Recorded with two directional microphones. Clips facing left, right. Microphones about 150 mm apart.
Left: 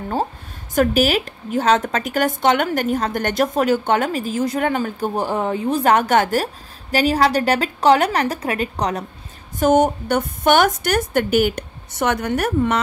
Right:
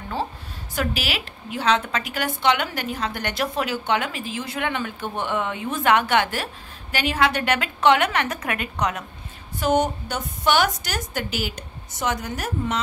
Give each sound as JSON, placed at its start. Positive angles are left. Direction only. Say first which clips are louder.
{"t": 0.7, "sound": "a woman's voice", "louder": "left 10 dB", "side_deg": 45}
{"t": 9.6, "sound": "a woman's voice", "louder": "left 6 dB", "side_deg": 45}